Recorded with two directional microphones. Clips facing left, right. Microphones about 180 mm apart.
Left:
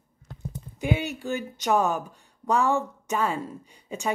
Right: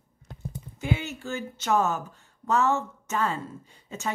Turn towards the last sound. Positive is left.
turn(degrees=15)  # may be behind; listen again after turning